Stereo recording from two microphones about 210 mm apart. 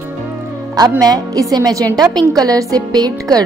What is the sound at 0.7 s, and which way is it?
A woman's voice, 20° right (ahead or behind).